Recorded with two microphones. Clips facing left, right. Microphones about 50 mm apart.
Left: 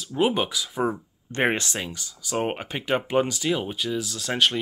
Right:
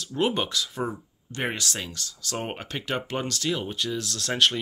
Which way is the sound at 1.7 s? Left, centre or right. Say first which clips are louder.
Left 3 dB; centre.